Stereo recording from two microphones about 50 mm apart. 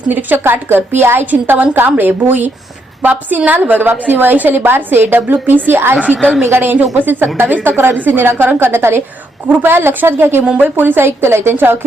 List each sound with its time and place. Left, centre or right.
0.1 s a woman's voice: right
8.0 s a woman's voice: right